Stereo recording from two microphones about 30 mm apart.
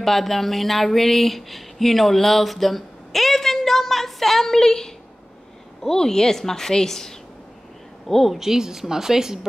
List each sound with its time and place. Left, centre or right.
0.0 s a woman's voice: centre
8.3 s a woman's voice: centre